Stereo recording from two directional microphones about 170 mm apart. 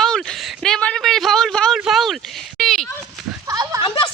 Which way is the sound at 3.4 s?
20° right (ahead or behind).